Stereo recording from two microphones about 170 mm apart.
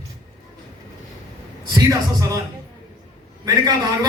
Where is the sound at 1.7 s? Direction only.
20° right (ahead or behind).